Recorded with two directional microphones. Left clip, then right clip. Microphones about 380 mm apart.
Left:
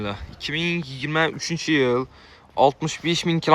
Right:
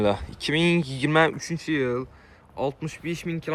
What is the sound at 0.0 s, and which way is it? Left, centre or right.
Speech, centre.